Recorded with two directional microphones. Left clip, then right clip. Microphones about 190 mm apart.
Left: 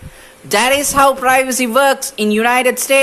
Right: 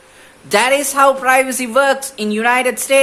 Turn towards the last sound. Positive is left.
turn(degrees=25)  # may be behind; listen again after turning